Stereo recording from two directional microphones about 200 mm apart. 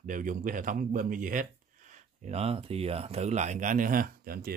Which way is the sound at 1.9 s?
30° right (ahead or behind).